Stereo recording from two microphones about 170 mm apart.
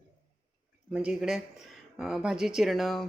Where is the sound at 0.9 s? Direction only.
5° right (ahead or behind).